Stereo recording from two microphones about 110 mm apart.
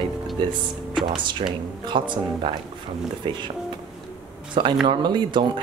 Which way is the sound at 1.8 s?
45° right (ahead or behind).